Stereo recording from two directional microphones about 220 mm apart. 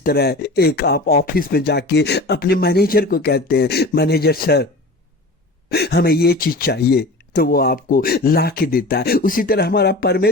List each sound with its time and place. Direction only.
0.0 s speech: 45° left (ahead or behind)